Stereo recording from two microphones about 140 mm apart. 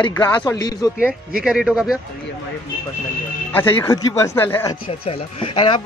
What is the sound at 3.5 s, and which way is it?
Speech, 15° left (ahead or behind).